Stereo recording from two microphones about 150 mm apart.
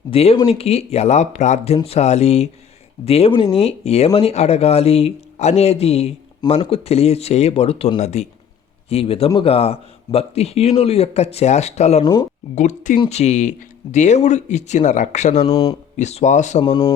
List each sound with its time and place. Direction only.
0.1 s speech: 45° left (ahead or behind)
16.6 s speech: 35° left (ahead or behind)